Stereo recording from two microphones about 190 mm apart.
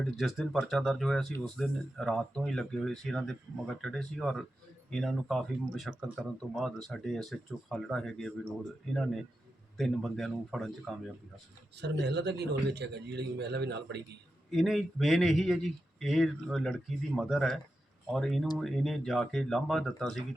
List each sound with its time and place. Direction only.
0.2 s speech: centre (ahead or behind)
11.8 s a man's voice: 65° right (ahead or behind)
14.5 s speech: centre (ahead or behind)